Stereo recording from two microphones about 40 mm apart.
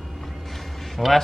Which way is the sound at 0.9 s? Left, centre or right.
Centre.